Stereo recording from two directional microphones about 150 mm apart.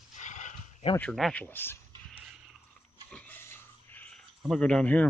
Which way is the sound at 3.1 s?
10° left (ahead or behind).